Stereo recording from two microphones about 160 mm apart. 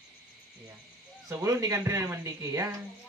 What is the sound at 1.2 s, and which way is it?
A man's voice, 20° right (ahead or behind).